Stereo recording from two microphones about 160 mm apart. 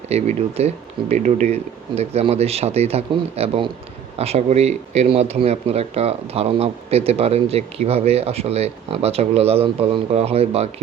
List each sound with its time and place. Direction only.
0.1 s speech: 45° right (ahead or behind)